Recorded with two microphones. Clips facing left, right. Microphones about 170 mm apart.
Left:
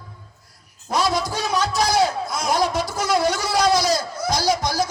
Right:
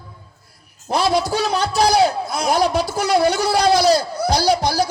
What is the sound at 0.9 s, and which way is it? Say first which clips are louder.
A man's voice: right 4 dB; 60° right (ahead or behind).